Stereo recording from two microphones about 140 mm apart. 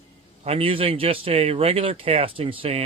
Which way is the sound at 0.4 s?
45° right (ahead or behind).